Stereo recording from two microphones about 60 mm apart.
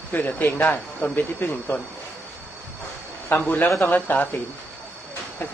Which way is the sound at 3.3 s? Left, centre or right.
Left.